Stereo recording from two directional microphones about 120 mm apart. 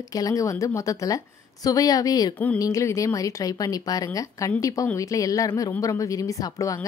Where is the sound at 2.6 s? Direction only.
25° left (ahead or behind).